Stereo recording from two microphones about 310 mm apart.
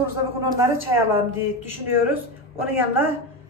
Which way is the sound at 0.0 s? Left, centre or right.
Centre.